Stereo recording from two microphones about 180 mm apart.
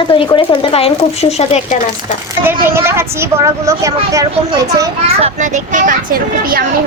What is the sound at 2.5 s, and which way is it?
Speech, 15° right (ahead or behind).